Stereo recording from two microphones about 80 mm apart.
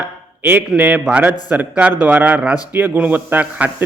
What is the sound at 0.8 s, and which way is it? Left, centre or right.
Speech, right.